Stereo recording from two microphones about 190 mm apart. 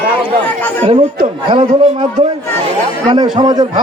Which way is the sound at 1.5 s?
25° right (ahead or behind).